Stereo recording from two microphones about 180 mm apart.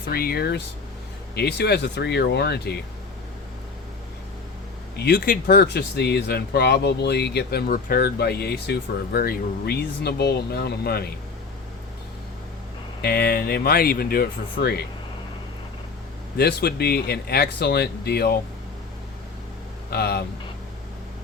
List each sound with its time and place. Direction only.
0.1 s speech: 55° left (ahead or behind)
4.9 s speech: 65° left (ahead or behind)
13.0 s speech: 60° left (ahead or behind)
16.4 s speech: 60° left (ahead or behind)
19.9 s speech: 60° left (ahead or behind)